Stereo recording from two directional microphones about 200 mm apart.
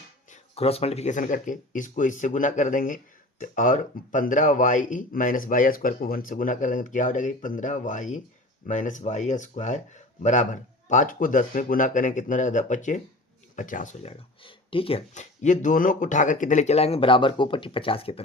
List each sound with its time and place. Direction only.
0.3 s speech: 30° left (ahead or behind)